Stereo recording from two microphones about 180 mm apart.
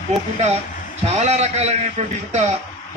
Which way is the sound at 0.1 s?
40° right (ahead or behind).